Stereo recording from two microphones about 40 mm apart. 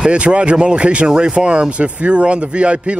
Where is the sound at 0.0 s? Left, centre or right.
Right.